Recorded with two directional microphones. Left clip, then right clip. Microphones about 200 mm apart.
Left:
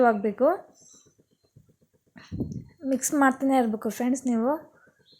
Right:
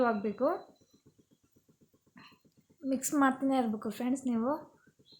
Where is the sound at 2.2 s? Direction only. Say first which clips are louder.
Left 5 dB; 20° left (ahead or behind).